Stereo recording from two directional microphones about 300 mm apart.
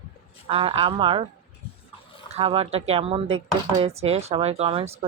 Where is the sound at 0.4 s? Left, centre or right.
Centre.